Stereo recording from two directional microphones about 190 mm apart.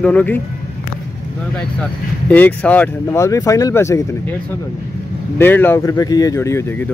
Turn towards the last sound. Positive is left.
turn(degrees=15)  # may be behind; listen again after turning